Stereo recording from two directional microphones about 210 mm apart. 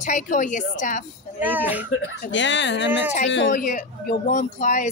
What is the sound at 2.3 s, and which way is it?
Speech, 60° left (ahead or behind).